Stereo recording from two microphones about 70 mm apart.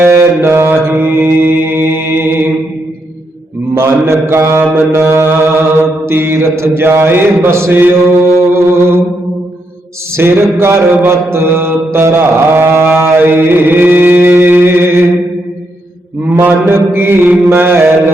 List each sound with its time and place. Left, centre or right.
0.0 s mantra: right
3.8 s mantra: right
10.2 s mantra: right
16.3 s mantra: right